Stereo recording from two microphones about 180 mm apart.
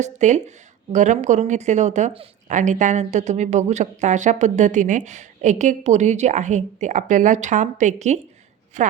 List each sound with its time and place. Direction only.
0.0 s speech: 40° right (ahead or behind)